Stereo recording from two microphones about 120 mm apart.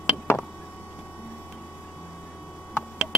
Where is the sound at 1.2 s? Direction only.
15° left (ahead or behind).